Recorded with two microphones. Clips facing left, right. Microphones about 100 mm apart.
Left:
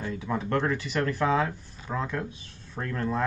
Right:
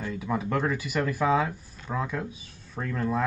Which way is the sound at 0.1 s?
5° right (ahead or behind).